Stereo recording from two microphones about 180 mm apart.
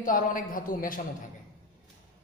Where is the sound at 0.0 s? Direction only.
50° left (ahead or behind).